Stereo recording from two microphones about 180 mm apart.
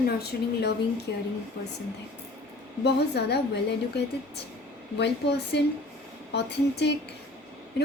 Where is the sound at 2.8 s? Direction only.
65° left (ahead or behind).